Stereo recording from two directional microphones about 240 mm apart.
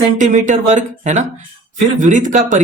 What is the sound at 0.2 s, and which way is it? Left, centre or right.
Speech, right.